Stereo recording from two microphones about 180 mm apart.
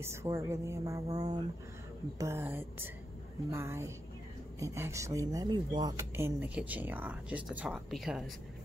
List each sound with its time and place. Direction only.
0.0 s speech: 15° right (ahead or behind)